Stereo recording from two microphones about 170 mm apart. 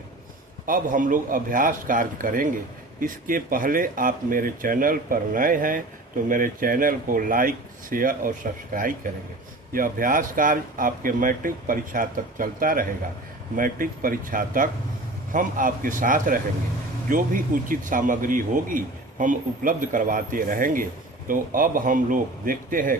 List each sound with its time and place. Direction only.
0.6 s speech: 50° right (ahead or behind)